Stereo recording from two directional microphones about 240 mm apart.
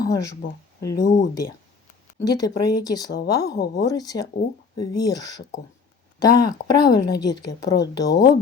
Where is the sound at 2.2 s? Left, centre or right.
Centre.